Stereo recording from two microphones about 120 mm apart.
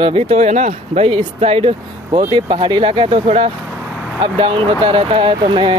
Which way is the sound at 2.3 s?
40° right (ahead or behind).